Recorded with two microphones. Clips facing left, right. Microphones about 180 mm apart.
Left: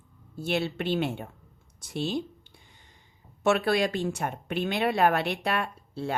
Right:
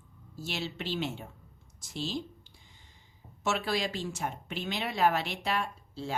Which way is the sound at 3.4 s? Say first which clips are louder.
Left 7 dB; 55° left (ahead or behind).